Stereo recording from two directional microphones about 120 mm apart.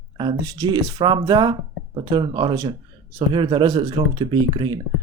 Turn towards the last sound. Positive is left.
turn(degrees=-40)  # may be behind; listen again after turning